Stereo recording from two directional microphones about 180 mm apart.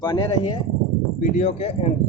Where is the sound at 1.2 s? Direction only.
40° left (ahead or behind).